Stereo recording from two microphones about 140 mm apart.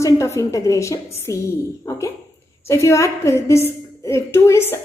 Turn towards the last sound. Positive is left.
turn(degrees=20)  # may be behind; listen again after turning